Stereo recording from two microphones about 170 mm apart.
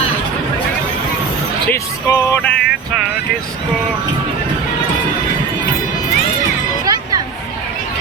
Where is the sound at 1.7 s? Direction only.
15° left (ahead or behind).